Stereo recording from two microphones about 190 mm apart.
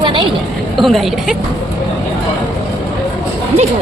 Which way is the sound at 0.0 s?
25° right (ahead or behind).